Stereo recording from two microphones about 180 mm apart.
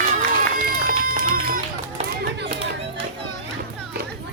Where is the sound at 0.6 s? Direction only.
55° right (ahead or behind).